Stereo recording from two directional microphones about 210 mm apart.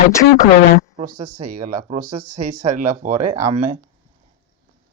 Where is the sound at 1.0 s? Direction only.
40° right (ahead or behind).